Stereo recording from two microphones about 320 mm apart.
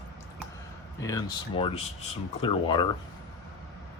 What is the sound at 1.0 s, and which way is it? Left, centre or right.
Speech, centre.